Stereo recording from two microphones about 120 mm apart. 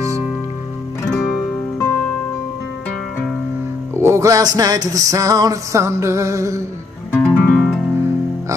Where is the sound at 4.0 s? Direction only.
25° right (ahead or behind).